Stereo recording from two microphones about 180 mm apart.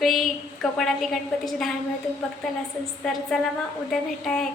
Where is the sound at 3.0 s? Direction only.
5° left (ahead or behind).